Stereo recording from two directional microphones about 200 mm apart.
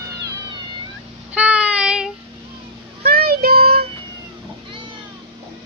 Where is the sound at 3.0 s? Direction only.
50° right (ahead or behind).